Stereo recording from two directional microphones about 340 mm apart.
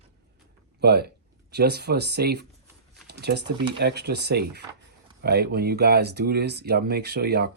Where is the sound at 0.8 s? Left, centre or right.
Right.